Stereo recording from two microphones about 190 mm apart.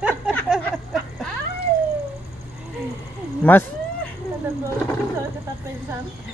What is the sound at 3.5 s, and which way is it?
Speech, 10° left (ahead or behind).